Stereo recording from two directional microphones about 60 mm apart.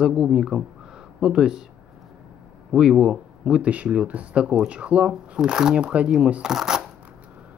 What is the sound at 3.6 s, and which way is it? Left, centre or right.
Speech, right.